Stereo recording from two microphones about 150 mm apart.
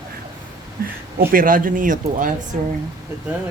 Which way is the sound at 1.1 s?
70° right (ahead or behind).